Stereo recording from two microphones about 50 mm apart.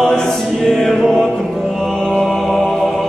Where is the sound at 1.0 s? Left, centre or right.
Centre.